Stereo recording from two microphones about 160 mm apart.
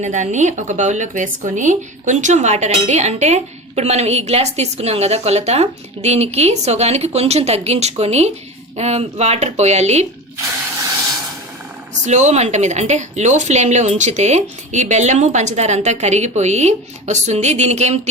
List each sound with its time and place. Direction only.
0.0 s speech: 50° right (ahead or behind)
12.0 s speech: 45° right (ahead or behind)